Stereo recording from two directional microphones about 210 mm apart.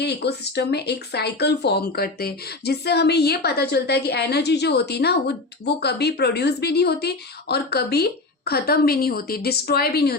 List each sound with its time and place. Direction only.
0.0 s speech: 50° left (ahead or behind)